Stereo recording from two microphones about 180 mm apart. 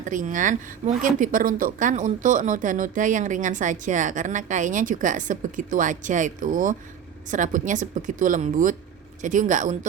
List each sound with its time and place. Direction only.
0.0 s speech: 45° right (ahead or behind)